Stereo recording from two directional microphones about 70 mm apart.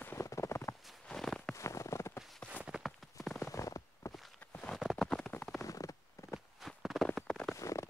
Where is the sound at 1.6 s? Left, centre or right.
Left.